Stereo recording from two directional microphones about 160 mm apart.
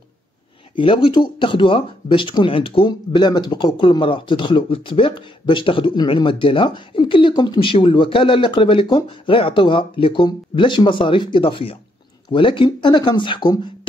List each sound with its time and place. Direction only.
0.7 s speech: 35° left (ahead or behind)